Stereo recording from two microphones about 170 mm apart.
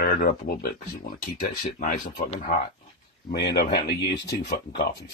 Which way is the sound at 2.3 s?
55° left (ahead or behind).